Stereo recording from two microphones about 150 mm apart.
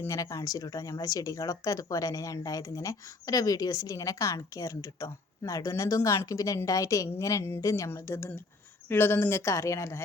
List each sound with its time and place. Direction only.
0.0 s speech: 20° left (ahead or behind)